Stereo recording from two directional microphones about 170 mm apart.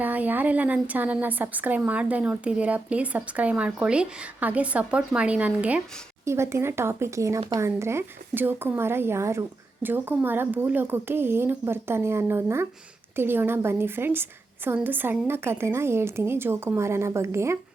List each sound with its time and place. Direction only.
0.0 s a woman's voice: 10° right (ahead or behind)